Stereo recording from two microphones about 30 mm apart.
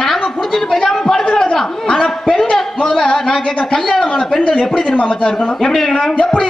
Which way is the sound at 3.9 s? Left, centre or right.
Left.